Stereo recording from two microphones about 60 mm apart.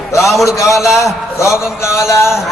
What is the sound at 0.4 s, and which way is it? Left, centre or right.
A man's voice, left.